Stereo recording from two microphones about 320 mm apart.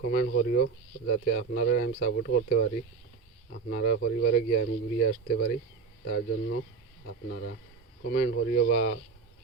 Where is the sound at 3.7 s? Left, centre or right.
Left.